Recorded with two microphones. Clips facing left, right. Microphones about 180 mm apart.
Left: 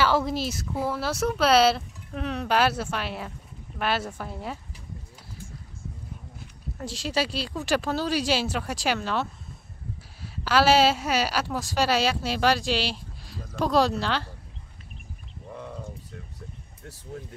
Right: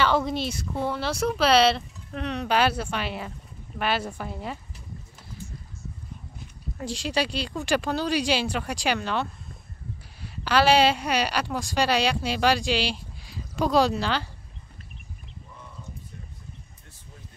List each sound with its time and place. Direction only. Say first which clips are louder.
0.0 s a woman's voice: even; 5° left (ahead or behind)
6.8 s a woman's voice: right 1 dB; centre (ahead or behind)
15.5 s a sound: left 11 dB; 70° left (ahead or behind)